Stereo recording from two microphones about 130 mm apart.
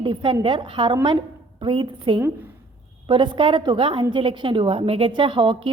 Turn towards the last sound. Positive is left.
turn(degrees=-40)  # may be behind; listen again after turning